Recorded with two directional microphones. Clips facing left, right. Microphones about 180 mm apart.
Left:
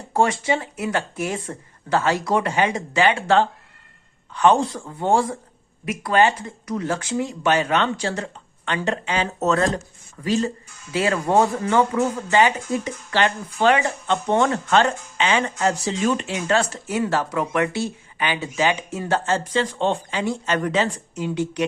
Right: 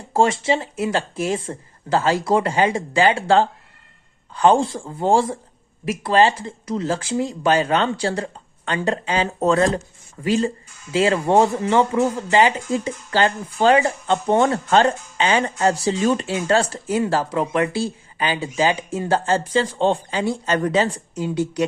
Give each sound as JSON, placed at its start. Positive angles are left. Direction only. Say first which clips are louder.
{"t": 0.1, "sound": "speech", "louder": "right 2 dB", "side_deg": -25}